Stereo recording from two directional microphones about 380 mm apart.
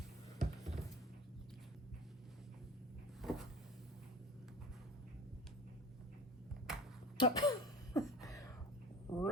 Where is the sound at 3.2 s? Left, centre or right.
Centre.